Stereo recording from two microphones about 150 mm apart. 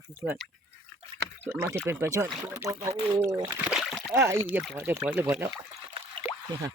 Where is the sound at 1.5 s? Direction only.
15° right (ahead or behind).